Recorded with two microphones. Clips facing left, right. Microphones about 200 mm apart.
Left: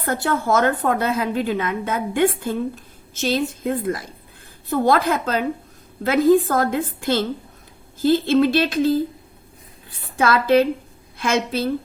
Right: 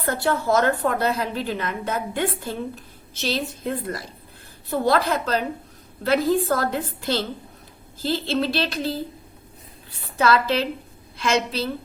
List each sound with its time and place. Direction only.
0.1 s a woman's voice: 50° left (ahead or behind)
10.2 s a woman's voice: 50° left (ahead or behind)